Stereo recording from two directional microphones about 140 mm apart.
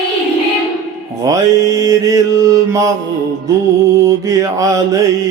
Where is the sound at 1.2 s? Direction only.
25° right (ahead or behind).